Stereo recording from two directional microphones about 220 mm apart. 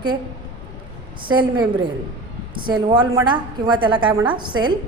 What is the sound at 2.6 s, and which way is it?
A woman's voice, 20° right (ahead or behind).